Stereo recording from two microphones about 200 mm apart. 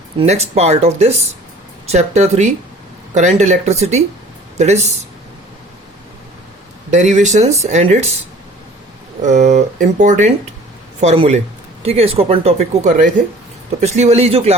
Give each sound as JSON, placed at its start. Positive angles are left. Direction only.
{"t": 0.2, "sound": "speech", "side_deg": -30}
{"t": 6.9, "sound": "speech", "side_deg": -35}
{"t": 9.2, "sound": "speech", "side_deg": -35}